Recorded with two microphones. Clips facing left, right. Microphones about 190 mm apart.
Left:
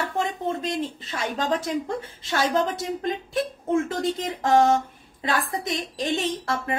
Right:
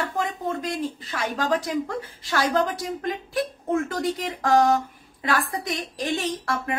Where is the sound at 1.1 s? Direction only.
25° left (ahead or behind).